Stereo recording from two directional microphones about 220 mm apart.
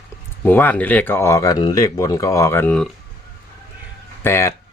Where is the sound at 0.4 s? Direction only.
10° left (ahead or behind).